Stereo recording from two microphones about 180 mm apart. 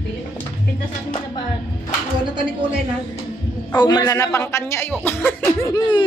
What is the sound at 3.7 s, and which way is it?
Speech, 25° left (ahead or behind).